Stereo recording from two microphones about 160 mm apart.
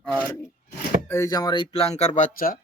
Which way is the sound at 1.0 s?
15° left (ahead or behind).